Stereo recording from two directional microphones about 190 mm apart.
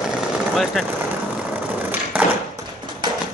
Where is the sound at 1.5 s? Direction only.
10° right (ahead or behind).